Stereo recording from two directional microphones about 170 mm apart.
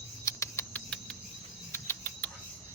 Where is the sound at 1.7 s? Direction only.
10° left (ahead or behind).